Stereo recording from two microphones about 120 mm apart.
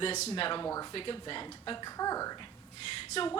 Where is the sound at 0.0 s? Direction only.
55° left (ahead or behind).